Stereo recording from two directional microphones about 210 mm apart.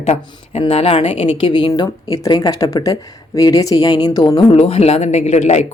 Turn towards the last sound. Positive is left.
turn(degrees=35)  # may be behind; listen again after turning